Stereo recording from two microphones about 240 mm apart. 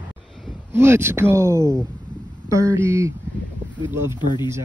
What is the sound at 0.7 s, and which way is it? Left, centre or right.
Speech, centre.